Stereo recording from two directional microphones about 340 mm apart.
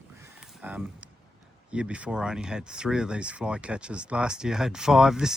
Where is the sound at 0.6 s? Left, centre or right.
Centre.